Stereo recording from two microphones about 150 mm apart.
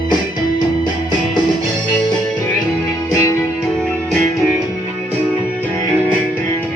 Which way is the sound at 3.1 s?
20° left (ahead or behind).